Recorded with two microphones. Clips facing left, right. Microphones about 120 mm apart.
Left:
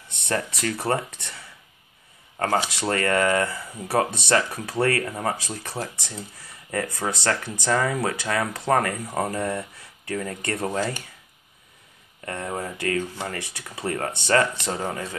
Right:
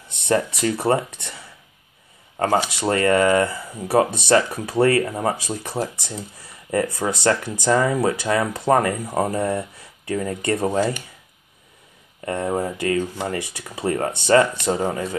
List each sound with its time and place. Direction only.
0.3 s speech: 15° right (ahead or behind)
2.3 s speech: 15° right (ahead or behind)
12.3 s speech: 20° right (ahead or behind)